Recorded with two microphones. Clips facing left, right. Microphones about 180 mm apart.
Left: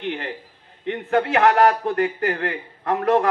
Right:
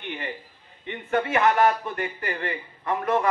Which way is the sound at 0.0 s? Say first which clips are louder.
Left 6 dB; 70° left (ahead or behind).